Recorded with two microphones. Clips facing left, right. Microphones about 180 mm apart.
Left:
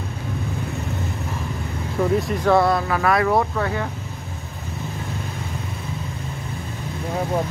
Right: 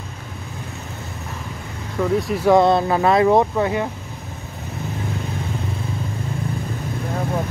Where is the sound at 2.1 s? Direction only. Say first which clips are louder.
Right 1 dB; centre (ahead or behind).